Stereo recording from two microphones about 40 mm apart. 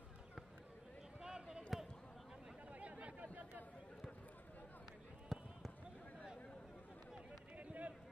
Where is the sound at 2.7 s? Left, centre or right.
Right.